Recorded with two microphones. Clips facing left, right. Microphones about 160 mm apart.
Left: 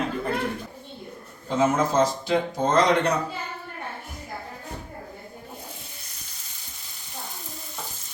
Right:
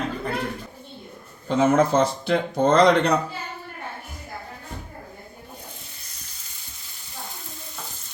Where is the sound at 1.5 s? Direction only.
65° right (ahead or behind).